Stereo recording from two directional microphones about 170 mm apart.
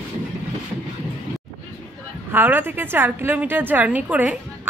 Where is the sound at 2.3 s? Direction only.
10° right (ahead or behind).